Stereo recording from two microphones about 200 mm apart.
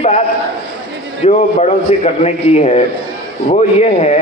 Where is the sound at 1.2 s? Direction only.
35° left (ahead or behind).